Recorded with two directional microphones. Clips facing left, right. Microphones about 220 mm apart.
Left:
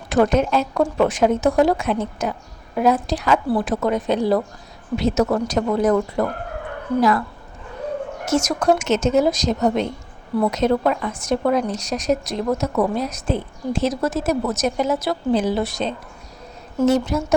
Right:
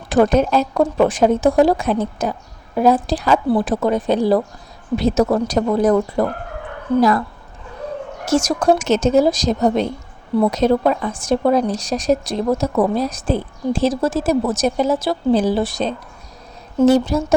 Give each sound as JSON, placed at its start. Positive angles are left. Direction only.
{"t": 0.1, "sound": "a woman's voice", "side_deg": -35}
{"t": 8.2, "sound": "a woman's voice", "side_deg": -30}